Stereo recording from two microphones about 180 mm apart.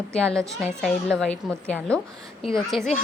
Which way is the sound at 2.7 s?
Centre (ahead or behind).